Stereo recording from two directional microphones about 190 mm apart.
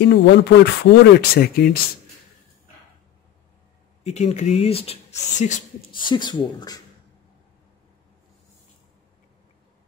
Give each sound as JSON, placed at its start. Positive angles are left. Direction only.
{"t": 0.0, "sound": "speech", "side_deg": 65}
{"t": 4.0, "sound": "speech", "side_deg": 35}
{"t": 5.9, "sound": "speech", "side_deg": 25}